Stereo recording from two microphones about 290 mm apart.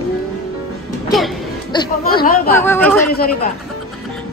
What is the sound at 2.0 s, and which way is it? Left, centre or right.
Speech, left.